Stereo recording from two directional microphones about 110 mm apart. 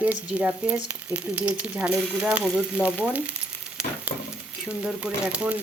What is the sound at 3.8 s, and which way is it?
Frying, 10° right (ahead or behind).